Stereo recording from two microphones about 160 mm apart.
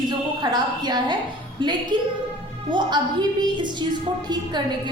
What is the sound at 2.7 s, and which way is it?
A woman's voice, 30° right (ahead or behind).